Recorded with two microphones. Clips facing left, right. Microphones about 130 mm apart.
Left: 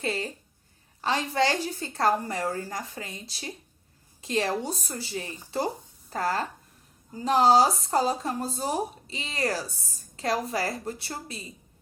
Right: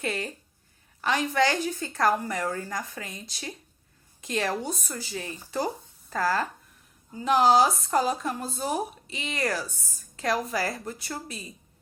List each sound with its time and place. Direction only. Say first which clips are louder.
0.0 s a woman's voice: left 1 dB; 30° left (ahead or behind)